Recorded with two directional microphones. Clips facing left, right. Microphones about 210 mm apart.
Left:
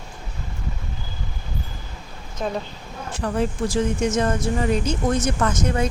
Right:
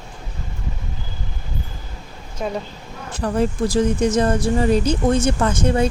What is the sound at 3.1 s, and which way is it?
Speech, 35° right (ahead or behind).